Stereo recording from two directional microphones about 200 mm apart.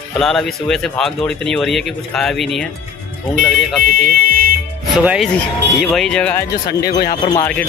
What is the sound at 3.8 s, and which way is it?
Speech, 45° right (ahead or behind).